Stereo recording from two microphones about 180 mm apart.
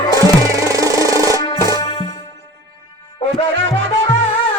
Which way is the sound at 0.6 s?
20° right (ahead or behind).